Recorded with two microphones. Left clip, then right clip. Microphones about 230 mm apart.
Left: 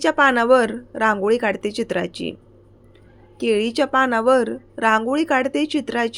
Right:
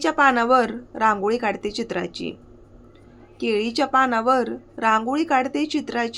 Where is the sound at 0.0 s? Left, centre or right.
Centre.